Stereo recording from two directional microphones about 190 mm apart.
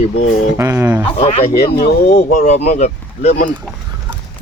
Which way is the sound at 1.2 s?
35° left (ahead or behind).